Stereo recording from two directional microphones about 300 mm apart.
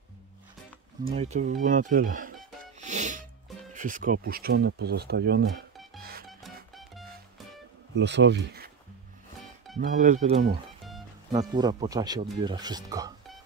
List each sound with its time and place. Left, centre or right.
1.1 s speech: right
2.8 s music: right
3.7 s speech: right
5.9 s music: right
7.9 s speech: right
9.8 s speech: right
10.8 s music: centre
11.3 s speech: centre